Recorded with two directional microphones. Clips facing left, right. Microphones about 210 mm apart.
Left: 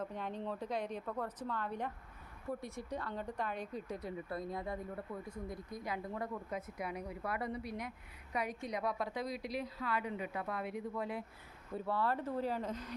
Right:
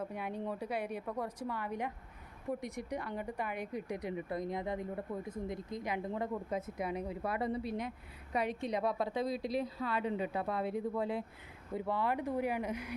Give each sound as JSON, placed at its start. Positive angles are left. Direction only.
{"t": 0.0, "sound": "a woman's voice", "side_deg": -10}
{"t": 11.7, "sound": "a woman's voice", "side_deg": -15}